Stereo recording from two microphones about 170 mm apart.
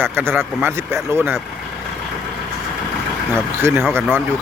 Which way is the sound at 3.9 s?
15° right (ahead or behind).